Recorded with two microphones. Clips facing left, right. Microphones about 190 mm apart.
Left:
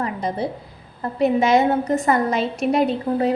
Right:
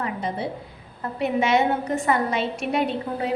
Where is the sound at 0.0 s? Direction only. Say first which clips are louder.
Left 3 dB; 40° left (ahead or behind).